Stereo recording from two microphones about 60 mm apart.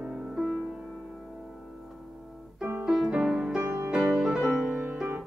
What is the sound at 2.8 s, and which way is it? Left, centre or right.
Music, centre.